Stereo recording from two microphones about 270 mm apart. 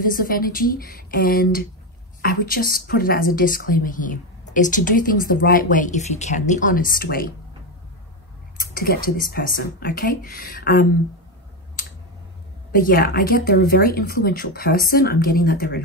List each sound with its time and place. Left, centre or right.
0.0 s a woman's voice: left
8.7 s a woman's voice: left
12.7 s a woman's voice: left